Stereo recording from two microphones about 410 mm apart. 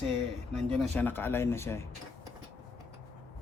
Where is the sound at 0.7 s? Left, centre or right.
Centre.